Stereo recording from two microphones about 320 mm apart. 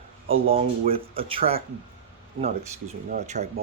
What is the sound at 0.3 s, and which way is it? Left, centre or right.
Speech, centre.